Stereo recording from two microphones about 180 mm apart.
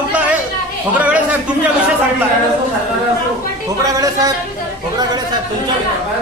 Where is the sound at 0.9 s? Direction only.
10° right (ahead or behind).